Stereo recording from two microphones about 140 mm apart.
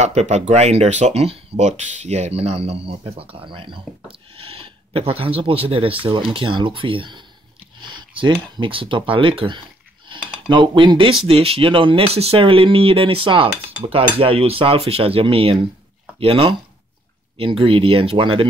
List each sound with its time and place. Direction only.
0.0 s speech: 55° right (ahead or behind); by 18.5 s 40° right (ahead or behind)